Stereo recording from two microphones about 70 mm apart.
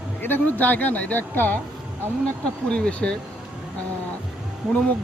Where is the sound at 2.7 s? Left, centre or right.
Centre.